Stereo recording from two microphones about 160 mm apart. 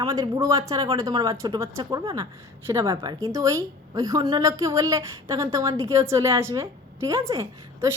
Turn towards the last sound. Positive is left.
turn(degrees=-20)  # may be behind; listen again after turning